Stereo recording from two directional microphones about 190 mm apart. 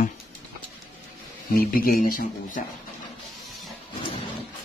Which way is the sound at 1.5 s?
50° left (ahead or behind).